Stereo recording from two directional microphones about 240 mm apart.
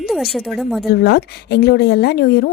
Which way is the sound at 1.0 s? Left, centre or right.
Left.